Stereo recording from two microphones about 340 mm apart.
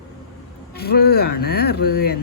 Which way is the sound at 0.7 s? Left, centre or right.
Left.